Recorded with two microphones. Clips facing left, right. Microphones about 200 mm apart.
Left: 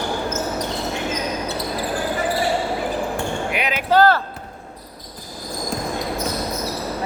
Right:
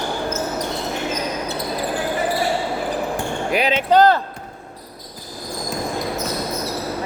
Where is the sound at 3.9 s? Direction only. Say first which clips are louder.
Right 1 dB; 20° right (ahead or behind).